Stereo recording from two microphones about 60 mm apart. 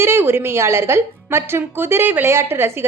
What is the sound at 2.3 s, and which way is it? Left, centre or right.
Speech, right.